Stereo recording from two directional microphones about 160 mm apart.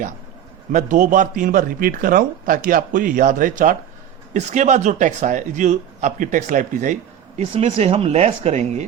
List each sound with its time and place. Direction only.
0.7 s a man's voice: 50° right (ahead or behind)